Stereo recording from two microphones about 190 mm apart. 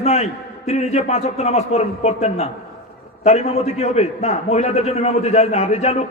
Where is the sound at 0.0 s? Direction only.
35° left (ahead or behind).